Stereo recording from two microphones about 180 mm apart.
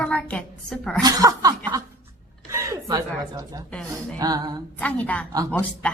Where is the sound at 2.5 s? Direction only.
15° right (ahead or behind).